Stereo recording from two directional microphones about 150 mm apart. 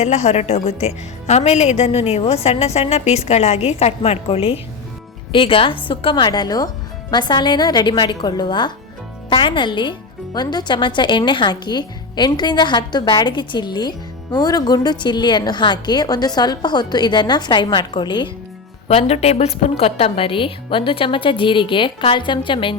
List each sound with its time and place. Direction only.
0.0 s a woman's voice: 45° left (ahead or behind); by 18.3 s 30° left (ahead or behind)
18.9 s a woman's voice: 45° left (ahead or behind)